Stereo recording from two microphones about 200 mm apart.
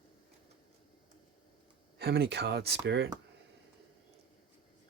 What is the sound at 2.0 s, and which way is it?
Speech, 55° right (ahead or behind).